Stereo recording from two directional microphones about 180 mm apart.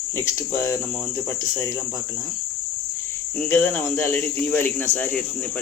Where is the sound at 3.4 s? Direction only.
10° left (ahead or behind).